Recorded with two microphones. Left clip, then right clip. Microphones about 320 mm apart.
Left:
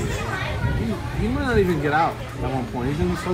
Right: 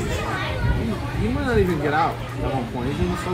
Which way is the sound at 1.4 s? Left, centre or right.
Centre.